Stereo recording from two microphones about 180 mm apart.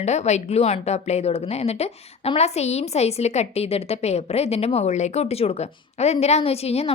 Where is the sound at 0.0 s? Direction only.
40° left (ahead or behind).